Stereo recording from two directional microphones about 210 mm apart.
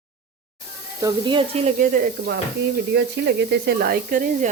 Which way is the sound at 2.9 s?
50° right (ahead or behind).